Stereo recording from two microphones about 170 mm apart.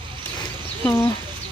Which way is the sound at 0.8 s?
15° left (ahead or behind).